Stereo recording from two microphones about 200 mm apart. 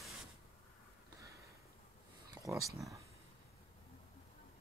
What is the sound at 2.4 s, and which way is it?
Speech, 15° right (ahead or behind).